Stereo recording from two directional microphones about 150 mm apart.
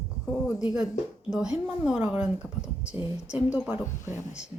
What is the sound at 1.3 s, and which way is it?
Speech, 5° right (ahead or behind).